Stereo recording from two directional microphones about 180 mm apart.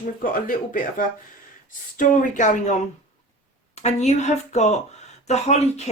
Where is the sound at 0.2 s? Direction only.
50° left (ahead or behind).